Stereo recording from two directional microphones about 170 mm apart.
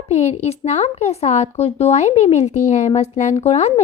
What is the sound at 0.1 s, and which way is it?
Speech, 40° left (ahead or behind).